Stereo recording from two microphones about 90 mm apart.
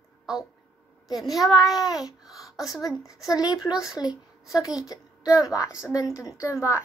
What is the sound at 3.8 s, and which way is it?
A woman's voice, 40° left (ahead or behind).